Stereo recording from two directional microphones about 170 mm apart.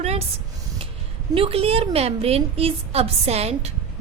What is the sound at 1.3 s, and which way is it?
A woman's voice, 35° right (ahead or behind).